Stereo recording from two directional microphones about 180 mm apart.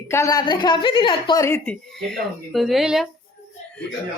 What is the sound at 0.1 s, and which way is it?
Speech, 15° left (ahead or behind).